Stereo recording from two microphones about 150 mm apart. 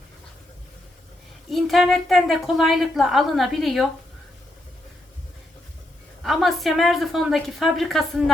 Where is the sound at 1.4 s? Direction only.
Centre (ahead or behind).